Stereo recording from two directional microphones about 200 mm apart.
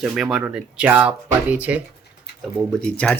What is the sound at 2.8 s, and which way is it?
Speech, 5° left (ahead or behind).